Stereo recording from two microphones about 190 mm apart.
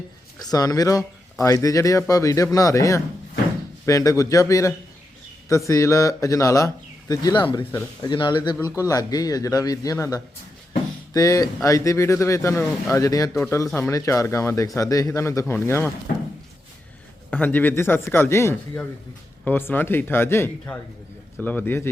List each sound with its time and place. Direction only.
0.3 s speech: 20° left (ahead or behind)
17.3 s speech: 10° left (ahead or behind)